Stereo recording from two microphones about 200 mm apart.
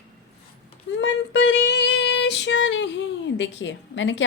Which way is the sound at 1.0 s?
65° left (ahead or behind).